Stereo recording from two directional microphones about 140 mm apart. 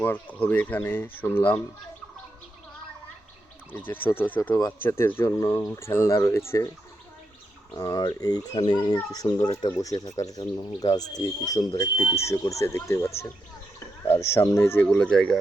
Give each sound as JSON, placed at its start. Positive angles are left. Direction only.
{"t": 0.0, "sound": "speech", "side_deg": 15}
{"t": 3.7, "sound": "speech", "side_deg": 15}
{"t": 7.8, "sound": "speech", "side_deg": 25}
{"t": 14.3, "sound": "speech", "side_deg": 20}